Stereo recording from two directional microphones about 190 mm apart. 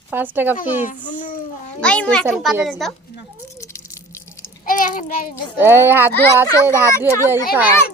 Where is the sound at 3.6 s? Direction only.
15° left (ahead or behind).